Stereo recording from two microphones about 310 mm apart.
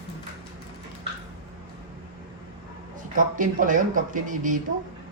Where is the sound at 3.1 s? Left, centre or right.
Right.